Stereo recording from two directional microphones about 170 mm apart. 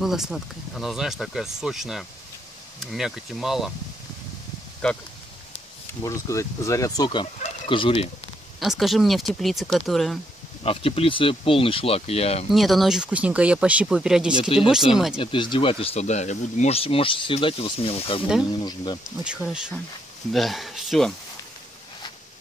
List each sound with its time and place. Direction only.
0.0 s speech: centre (ahead or behind)
4.8 s speech: 5° left (ahead or behind)
6.0 s speech: 20° left (ahead or behind)
8.5 s speech: centre (ahead or behind)
10.6 s speech: 35° left (ahead or behind)
12.4 s speech: centre (ahead or behind)
14.5 s speech: 35° left (ahead or behind)
14.9 s speech: 5° right (ahead or behind)
15.1 s speech: 30° left (ahead or behind)
19.0 s speech: 5° right (ahead or behind)